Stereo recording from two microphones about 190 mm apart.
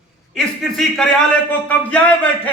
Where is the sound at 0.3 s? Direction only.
Centre (ahead or behind).